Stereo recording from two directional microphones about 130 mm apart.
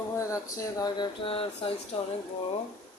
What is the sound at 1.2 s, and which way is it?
Speech, 45° left (ahead or behind).